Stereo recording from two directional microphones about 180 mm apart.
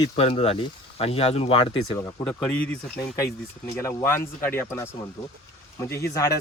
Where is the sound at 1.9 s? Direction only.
10° left (ahead or behind).